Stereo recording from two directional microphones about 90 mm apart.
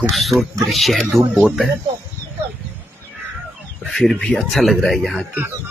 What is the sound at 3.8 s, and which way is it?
Speech, 5° left (ahead or behind).